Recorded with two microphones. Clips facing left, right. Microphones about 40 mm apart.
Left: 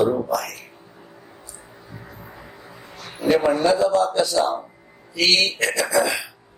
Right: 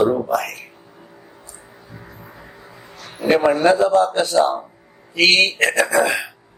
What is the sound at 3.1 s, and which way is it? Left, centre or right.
A man's voice, right.